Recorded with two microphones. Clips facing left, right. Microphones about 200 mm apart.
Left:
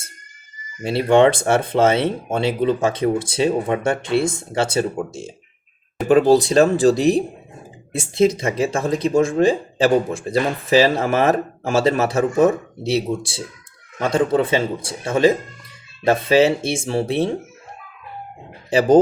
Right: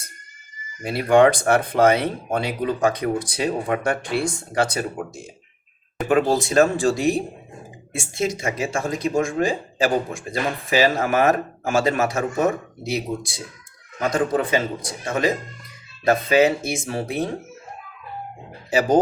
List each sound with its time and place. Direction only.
0.8 s speech: 25° left (ahead or behind)